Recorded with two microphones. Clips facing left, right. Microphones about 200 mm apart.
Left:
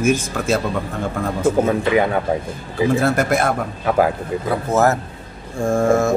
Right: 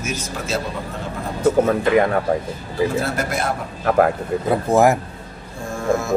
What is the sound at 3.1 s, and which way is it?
Speech, 55° left (ahead or behind).